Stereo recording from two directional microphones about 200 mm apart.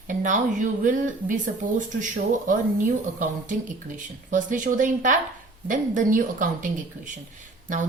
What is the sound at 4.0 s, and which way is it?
A woman's voice, 40° right (ahead or behind).